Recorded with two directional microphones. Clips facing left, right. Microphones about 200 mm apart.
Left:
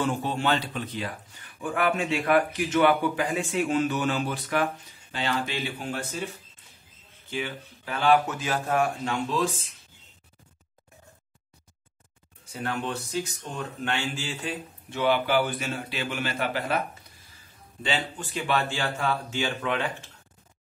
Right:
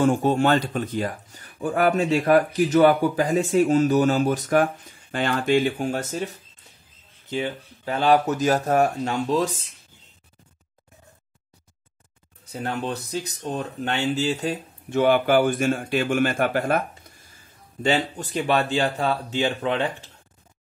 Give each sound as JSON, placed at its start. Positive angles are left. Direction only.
{"t": 0.0, "sound": "speech", "side_deg": -45}
{"t": 12.7, "sound": "speech", "side_deg": -40}
{"t": 17.8, "sound": "speech", "side_deg": -40}